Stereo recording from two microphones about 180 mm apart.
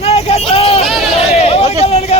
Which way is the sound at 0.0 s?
35° left (ahead or behind).